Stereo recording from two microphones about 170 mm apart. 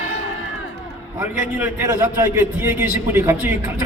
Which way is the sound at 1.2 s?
15° right (ahead or behind).